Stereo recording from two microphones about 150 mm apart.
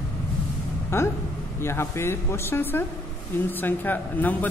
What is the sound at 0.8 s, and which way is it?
Speech, 15° left (ahead or behind).